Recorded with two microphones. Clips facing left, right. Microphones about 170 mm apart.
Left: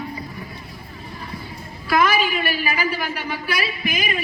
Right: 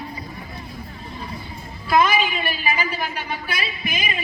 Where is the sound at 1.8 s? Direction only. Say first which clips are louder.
Even; 20° right (ahead or behind).